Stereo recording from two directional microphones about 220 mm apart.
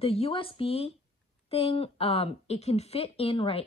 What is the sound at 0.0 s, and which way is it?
Speech, 25° left (ahead or behind).